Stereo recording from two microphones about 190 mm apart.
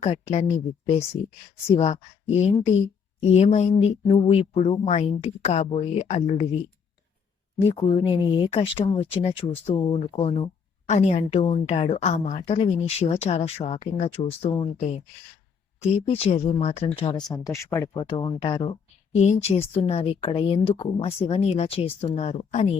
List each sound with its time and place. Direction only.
0.0 s a woman's voice: 35° left (ahead or behind)
1.7 s a woman's voice: 35° left (ahead or behind)
7.8 s a woman's voice: 25° left (ahead or behind)
18.1 s a woman's voice: 25° left (ahead or behind)